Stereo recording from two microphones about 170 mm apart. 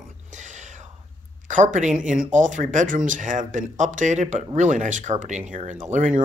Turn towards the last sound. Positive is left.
turn(degrees=-45)  # may be behind; listen again after turning